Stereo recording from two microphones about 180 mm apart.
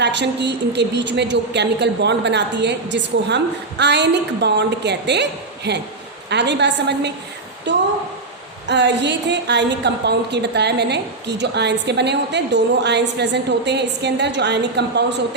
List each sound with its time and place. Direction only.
0.0 s a woman's voice: 75° right (ahead or behind)